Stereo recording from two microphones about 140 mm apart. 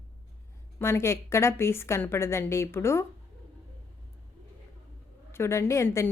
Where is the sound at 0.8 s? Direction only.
20° left (ahead or behind).